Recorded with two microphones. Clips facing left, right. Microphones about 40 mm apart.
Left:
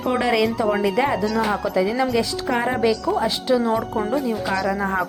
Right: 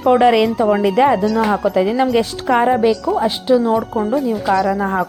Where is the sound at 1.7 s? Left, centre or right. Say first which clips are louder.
Right 3 dB; right.